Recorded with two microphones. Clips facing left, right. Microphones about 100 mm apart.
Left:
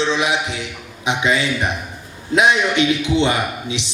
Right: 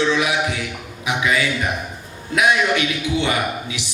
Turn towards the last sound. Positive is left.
turn(degrees=25)  # may be behind; listen again after turning